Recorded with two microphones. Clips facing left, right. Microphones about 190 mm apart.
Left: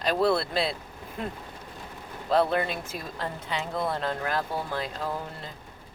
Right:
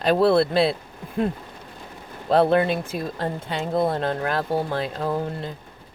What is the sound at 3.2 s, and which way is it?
Speech, 45° right (ahead or behind).